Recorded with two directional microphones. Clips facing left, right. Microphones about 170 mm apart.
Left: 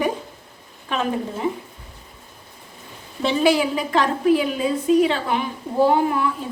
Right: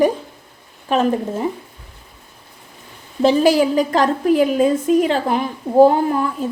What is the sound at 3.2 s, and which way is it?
A woman's voice, 40° right (ahead or behind).